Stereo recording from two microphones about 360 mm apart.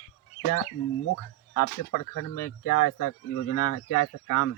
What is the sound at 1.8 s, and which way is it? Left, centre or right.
A man's voice, left.